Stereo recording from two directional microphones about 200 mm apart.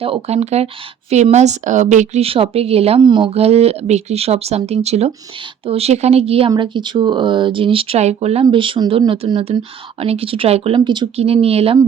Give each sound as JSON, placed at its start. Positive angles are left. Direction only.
{"t": 0.0, "sound": "speech", "side_deg": -30}